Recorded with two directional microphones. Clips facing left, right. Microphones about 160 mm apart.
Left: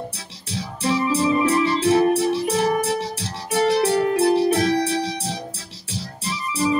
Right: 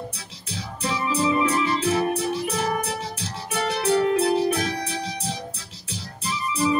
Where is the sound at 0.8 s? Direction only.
35° left (ahead or behind).